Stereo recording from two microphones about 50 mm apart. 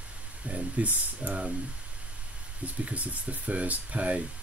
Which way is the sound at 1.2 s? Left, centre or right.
Right.